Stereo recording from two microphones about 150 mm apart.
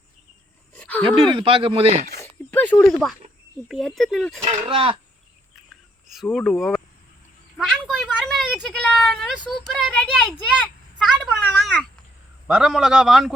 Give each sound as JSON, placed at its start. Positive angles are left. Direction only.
{"t": 0.8, "sound": "a sound", "side_deg": 10}
{"t": 1.3, "sound": "speech", "side_deg": -35}
{"t": 2.1, "sound": "a sound", "side_deg": 15}
{"t": 3.7, "sound": "a man's voice", "side_deg": 0}
{"t": 4.4, "sound": "speech", "side_deg": -35}
{"t": 6.3, "sound": "a man's voice", "side_deg": 0}
{"t": 7.6, "sound": "a sound", "side_deg": 5}
{"t": 11.4, "sound": "cat", "side_deg": 5}
{"t": 12.5, "sound": "a man's voice", "side_deg": -5}